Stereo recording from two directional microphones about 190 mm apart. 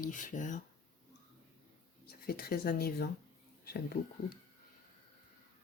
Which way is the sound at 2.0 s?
55° left (ahead or behind).